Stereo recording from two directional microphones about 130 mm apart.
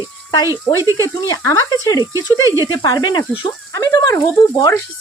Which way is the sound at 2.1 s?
25° right (ahead or behind).